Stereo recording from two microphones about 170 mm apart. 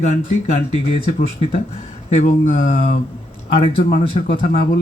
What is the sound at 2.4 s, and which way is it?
Speech, 50° left (ahead or behind).